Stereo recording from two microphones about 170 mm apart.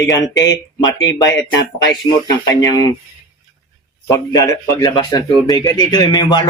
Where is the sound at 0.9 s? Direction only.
90° left.